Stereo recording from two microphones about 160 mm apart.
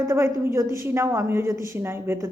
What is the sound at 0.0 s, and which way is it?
A woman's voice, 15° right (ahead or behind).